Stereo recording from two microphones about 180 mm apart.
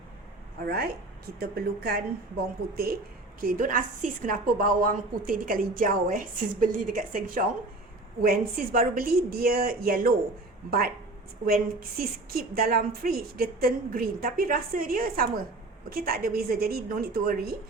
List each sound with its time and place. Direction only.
0.6 s a woman's voice: 60° right (ahead or behind)
3.4 s a woman's voice: 50° right (ahead or behind)